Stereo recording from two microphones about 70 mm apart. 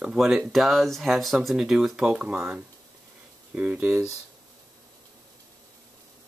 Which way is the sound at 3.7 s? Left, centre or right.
Right.